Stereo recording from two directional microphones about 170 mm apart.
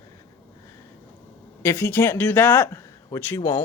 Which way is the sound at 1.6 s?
15° left (ahead or behind).